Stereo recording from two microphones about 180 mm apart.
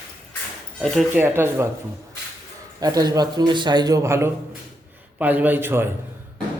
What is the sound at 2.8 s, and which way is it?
A man's voice, 20° right (ahead or behind).